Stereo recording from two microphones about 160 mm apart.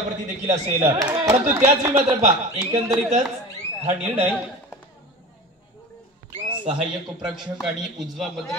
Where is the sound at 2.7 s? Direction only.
20° right (ahead or behind).